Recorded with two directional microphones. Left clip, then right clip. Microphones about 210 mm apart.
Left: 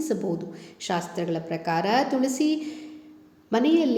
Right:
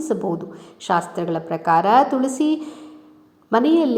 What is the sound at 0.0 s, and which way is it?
A woman's voice, 5° right (ahead or behind).